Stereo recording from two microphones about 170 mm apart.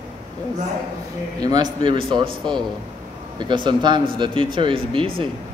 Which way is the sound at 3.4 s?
25° right (ahead or behind).